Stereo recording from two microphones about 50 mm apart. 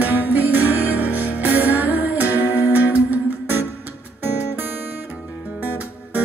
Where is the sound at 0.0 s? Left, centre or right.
Right.